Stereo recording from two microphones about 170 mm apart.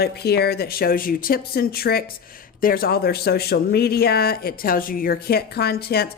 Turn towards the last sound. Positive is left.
turn(degrees=65)  # may be behind; listen again after turning